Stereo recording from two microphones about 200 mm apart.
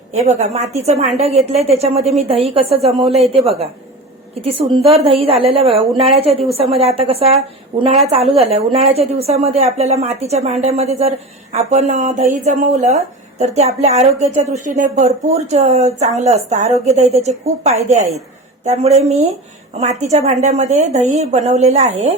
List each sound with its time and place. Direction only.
0.1 s a woman's voice: 35° right (ahead or behind)